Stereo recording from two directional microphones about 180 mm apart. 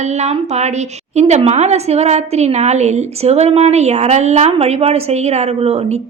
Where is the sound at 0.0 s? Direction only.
40° right (ahead or behind).